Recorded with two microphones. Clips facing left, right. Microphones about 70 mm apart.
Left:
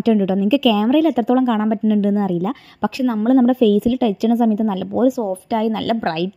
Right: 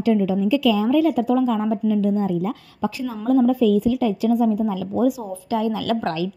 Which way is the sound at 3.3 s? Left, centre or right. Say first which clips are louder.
Left 3 dB; left.